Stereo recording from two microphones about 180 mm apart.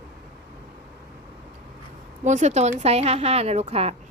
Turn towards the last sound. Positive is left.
turn(degrees=-35)  # may be behind; listen again after turning